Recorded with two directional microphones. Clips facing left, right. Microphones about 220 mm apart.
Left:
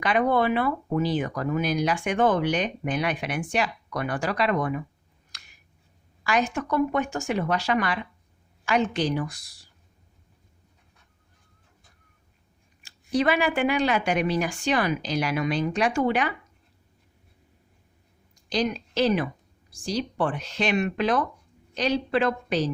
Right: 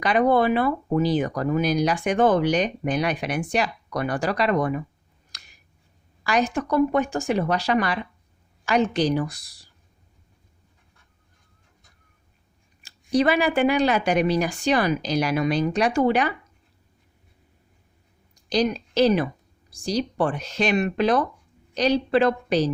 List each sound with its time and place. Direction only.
0.0 s speech: 35° right (ahead or behind)
6.2 s speech: 35° right (ahead or behind)
12.8 s speech: 40° right (ahead or behind)
18.4 s a woman's voice: 40° right (ahead or behind)